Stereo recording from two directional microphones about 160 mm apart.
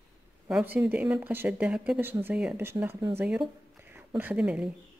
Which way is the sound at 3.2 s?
5° right (ahead or behind).